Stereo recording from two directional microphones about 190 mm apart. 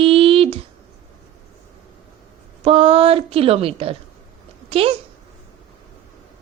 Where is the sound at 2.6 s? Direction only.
30° right (ahead or behind).